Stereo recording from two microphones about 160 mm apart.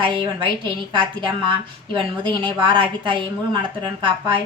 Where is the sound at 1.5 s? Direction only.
30° right (ahead or behind).